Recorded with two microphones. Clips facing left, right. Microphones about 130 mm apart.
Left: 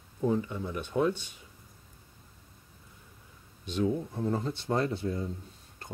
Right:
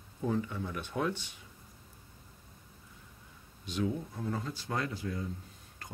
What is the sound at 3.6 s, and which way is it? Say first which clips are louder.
Speech: left 4 dB; 25° left (ahead or behind).